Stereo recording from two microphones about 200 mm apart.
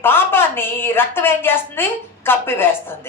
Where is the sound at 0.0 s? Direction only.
10° left (ahead or behind).